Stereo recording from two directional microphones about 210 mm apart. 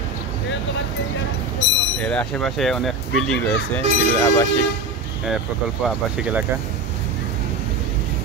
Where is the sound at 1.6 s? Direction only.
60° left (ahead or behind).